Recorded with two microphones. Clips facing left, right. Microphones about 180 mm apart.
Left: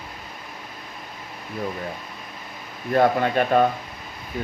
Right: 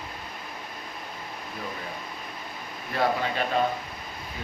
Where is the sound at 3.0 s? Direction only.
55° left (ahead or behind).